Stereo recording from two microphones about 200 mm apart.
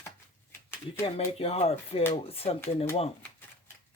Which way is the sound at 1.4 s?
30° left (ahead or behind).